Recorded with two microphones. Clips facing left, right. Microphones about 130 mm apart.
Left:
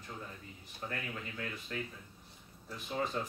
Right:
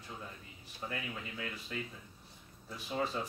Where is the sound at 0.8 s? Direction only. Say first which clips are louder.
Even; 5° right (ahead or behind).